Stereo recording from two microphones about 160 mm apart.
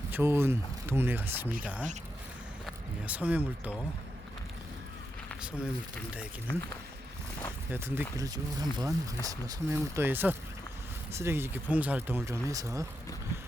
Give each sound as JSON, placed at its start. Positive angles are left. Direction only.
{"t": 0.1, "sound": "speech", "side_deg": -15}
{"t": 5.3, "sound": "a sound", "side_deg": -5}
{"t": 7.7, "sound": "speech", "side_deg": -10}